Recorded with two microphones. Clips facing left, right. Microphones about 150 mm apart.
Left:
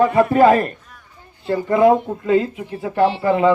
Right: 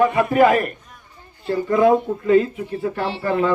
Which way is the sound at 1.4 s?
20° left (ahead or behind).